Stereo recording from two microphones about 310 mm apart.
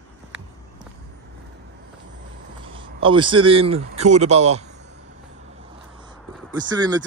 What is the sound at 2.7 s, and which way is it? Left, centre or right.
A man's voice, centre.